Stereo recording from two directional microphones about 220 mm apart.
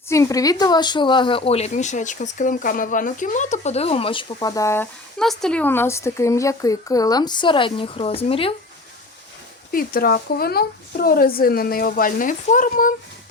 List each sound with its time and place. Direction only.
0.1 s speech: 15° left (ahead or behind)
9.7 s speech: 40° left (ahead or behind)